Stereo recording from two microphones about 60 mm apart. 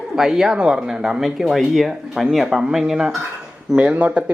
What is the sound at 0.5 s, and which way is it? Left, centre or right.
Speech, centre.